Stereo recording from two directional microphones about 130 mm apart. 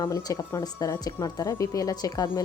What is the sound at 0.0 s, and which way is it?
A woman's voice, 30° left (ahead or behind).